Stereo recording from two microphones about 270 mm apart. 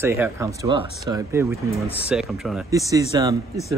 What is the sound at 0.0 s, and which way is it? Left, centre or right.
Speech, centre.